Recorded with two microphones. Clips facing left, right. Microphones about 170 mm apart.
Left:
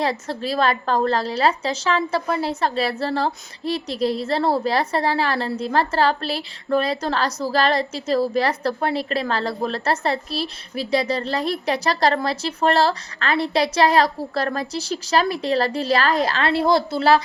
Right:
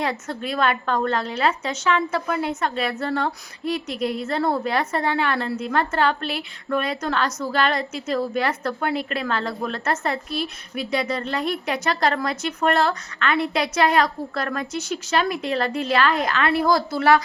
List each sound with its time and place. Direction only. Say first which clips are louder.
0.0 s a woman's voice: left 3 dB; 35° left (ahead or behind)